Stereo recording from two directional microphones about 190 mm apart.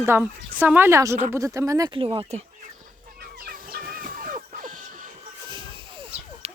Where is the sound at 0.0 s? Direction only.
10° right (ahead or behind).